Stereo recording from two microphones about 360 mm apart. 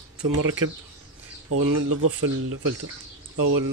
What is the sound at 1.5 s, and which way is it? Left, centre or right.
Speech, right.